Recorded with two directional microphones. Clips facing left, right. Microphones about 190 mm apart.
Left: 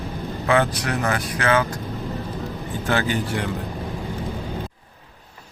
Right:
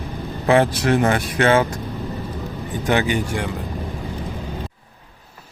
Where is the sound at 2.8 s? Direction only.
15° right (ahead or behind).